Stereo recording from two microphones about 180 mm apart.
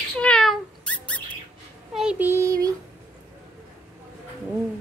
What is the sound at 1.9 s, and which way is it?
Speech, 5° right (ahead or behind).